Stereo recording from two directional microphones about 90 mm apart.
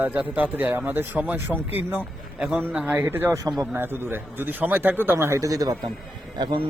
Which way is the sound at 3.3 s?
40° right (ahead or behind).